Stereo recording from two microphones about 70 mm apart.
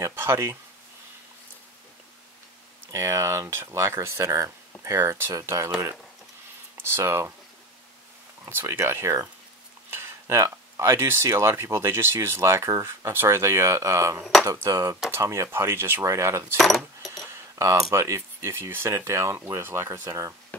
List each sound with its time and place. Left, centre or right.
0.1 s speech: right
2.9 s speech: right
6.8 s speech: right
8.5 s speech: right
15.5 s speech: right
16.5 s speech: centre
17.3 s keys jangling: right
17.9 s speech: right